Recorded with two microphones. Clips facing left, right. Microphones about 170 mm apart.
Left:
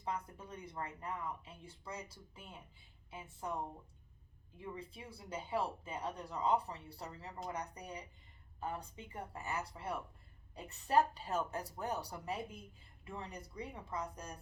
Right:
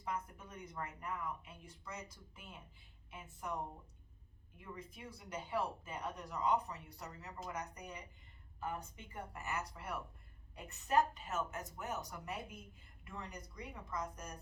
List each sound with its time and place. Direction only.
0.0 s speech: 30° left (ahead or behind)